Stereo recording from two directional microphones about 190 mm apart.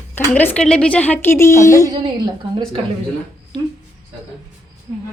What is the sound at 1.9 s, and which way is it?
Speech, 20° right (ahead or behind).